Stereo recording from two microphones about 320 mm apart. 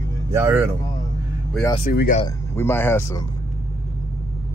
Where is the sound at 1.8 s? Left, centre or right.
Left.